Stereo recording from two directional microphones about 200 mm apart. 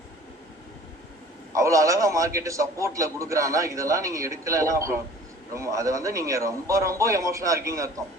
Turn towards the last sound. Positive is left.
turn(degrees=-15)  # may be behind; listen again after turning